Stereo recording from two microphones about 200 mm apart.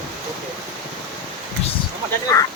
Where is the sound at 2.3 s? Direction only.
15° left (ahead or behind).